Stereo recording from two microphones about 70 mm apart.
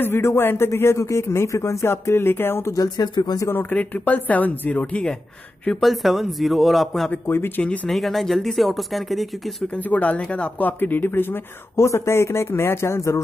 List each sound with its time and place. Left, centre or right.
0.0 s speech: left
2.7 s speech: left
3.5 s speech: left
5.8 s speech: centre
7.1 s speech: left
7.6 s speech: centre
7.9 s speech: centre
9.7 s speech: left